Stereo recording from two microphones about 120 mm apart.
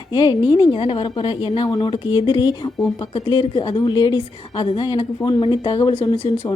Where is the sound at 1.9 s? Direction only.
40° left (ahead or behind).